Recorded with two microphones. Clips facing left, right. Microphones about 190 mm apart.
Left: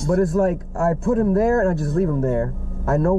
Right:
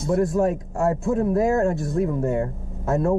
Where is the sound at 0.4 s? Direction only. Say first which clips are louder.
Left 2 dB; 20° right (ahead or behind).